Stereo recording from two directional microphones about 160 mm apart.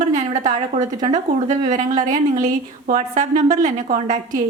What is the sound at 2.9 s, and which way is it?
Speech, 55° right (ahead or behind).